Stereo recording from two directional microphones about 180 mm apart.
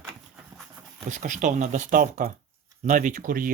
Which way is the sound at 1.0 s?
45° right (ahead or behind).